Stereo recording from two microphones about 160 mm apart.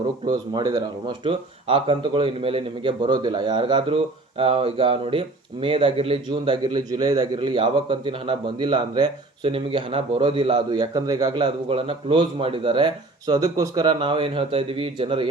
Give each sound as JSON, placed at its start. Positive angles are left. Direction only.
{"t": 0.3, "sound": "speech", "side_deg": -25}